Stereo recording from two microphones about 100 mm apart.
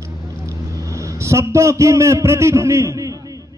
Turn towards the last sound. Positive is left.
turn(degrees=-35)  # may be behind; listen again after turning